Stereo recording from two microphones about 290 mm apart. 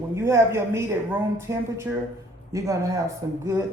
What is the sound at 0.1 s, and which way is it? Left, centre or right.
A woman's voice, centre.